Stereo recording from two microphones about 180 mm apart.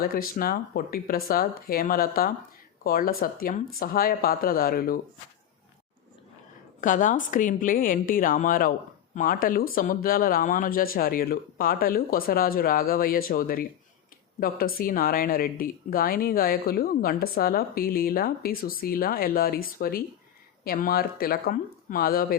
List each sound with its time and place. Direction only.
0.0 s speech: 55° left (ahead or behind)
6.8 s speech: 45° left (ahead or behind)